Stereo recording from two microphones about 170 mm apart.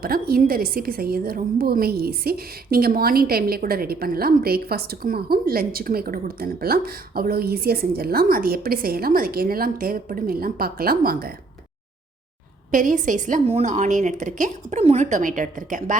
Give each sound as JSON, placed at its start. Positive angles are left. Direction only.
{"t": 0.0, "sound": "a woman's voice", "side_deg": -60}
{"t": 12.7, "sound": "a woman's voice", "side_deg": -50}